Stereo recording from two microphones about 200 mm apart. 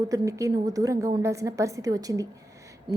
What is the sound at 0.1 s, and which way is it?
A woman's voice, 15° right (ahead or behind).